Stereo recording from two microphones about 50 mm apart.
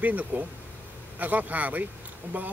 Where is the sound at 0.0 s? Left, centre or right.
Right.